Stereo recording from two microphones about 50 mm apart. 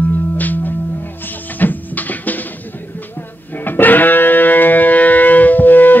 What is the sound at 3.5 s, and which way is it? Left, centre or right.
Music, left.